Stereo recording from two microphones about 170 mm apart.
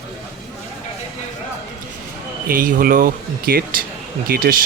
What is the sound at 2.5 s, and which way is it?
Speech, 55° right (ahead or behind).